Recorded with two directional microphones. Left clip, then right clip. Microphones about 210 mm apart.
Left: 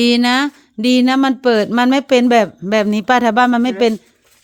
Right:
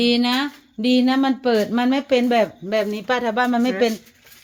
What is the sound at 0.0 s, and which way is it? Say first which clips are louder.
A woman's voice: left 5 dB; 55° left (ahead or behind).